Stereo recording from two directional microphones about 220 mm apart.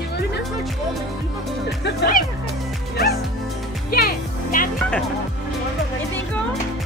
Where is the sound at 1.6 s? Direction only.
50° left (ahead or behind).